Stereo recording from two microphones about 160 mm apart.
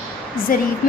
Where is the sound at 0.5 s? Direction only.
60° left (ahead or behind).